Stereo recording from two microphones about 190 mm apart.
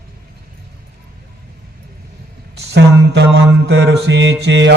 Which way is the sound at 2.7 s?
65° right (ahead or behind).